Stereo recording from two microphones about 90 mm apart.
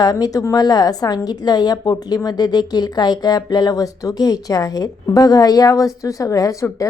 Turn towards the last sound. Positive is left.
turn(degrees=40)  # may be behind; listen again after turning